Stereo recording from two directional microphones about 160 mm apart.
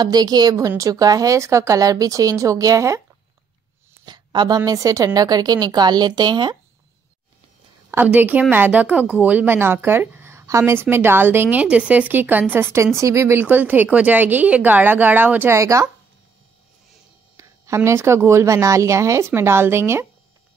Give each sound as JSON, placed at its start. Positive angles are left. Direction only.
{"t": 0.0, "sound": "a woman's voice", "side_deg": -25}
{"t": 4.0, "sound": "a woman's voice", "side_deg": -30}
{"t": 7.9, "sound": "a woman's voice", "side_deg": -10}
{"t": 17.4, "sound": "a woman's voice", "side_deg": -20}